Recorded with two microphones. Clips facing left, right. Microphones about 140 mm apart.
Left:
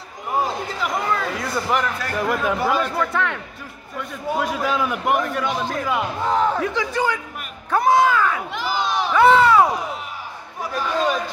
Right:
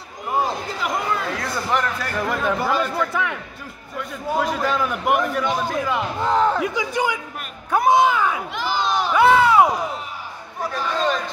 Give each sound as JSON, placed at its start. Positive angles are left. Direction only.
{"t": 1.4, "sound": "a man's voice", "side_deg": 5}
{"t": 6.6, "sound": "a man's voice", "side_deg": -15}
{"t": 7.7, "sound": "a sound", "side_deg": -15}
{"t": 8.5, "sound": "crowd", "side_deg": 5}
{"t": 9.1, "sound": "a sound", "side_deg": -10}
{"t": 10.7, "sound": "a man's voice", "side_deg": 10}